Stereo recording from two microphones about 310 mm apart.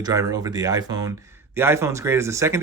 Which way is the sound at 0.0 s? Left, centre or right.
Centre.